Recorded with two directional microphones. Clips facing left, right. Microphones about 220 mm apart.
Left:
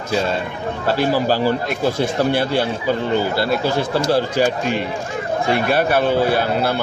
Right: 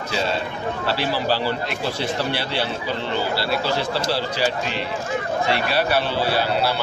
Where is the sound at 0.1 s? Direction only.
50° left (ahead or behind).